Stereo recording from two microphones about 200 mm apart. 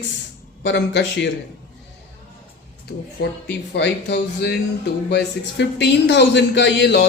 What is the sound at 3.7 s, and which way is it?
Speech, 60° left (ahead or behind).